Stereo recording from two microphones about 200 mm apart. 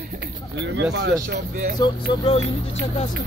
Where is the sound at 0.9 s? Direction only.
60° right (ahead or behind).